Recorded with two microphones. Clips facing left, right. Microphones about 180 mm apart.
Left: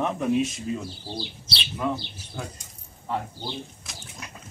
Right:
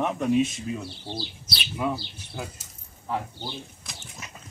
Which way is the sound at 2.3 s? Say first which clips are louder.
Even; 5° right (ahead or behind).